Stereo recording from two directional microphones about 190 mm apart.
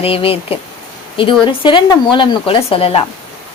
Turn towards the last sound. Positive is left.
turn(degrees=30)  # may be behind; listen again after turning